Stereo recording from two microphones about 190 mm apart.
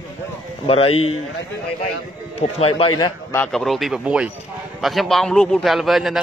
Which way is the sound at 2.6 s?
30° left (ahead or behind).